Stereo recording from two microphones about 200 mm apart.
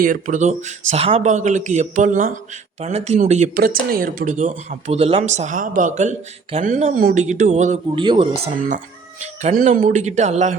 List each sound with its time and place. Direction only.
0.0 s speech: 40° right (ahead or behind)
8.0 s speech: 25° right (ahead or behind)
9.2 s speech: 40° right (ahead or behind)